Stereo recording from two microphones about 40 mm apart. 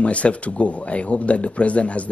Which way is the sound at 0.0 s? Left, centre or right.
Left.